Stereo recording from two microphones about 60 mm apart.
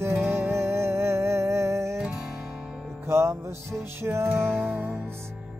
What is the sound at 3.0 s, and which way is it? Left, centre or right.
Music, right.